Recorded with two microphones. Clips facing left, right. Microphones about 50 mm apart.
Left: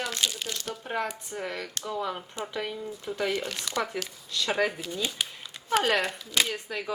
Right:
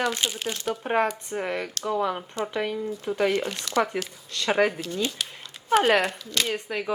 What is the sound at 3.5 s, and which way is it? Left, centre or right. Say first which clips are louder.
Speech: right 3 dB; centre.